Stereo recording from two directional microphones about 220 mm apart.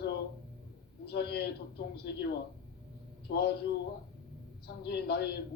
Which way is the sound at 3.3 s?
45° left (ahead or behind).